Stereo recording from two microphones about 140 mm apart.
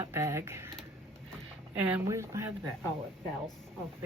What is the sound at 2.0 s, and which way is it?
Speech, 20° right (ahead or behind).